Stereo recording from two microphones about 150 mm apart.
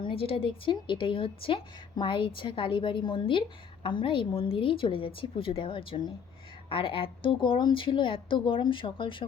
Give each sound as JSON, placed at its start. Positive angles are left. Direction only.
{"t": 0.0, "sound": "a woman's voice", "side_deg": 40}